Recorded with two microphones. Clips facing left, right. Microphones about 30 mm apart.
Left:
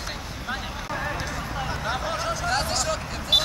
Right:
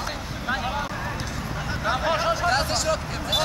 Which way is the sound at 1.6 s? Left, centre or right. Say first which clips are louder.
Right 5 dB; centre.